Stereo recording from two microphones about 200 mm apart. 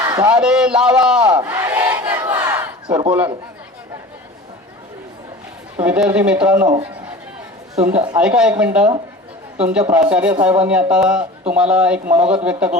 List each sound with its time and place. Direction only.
0.0 s a sound: 20° right (ahead or behind)
0.3 s speech: 5° right (ahead or behind)
1.2 s battle cry: 20° right (ahead or behind)
5.8 s speech: 5° right (ahead or behind)
7.8 s speech: 10° right (ahead or behind)